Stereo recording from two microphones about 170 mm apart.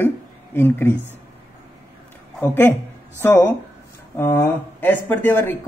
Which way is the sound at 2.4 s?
10° left (ahead or behind).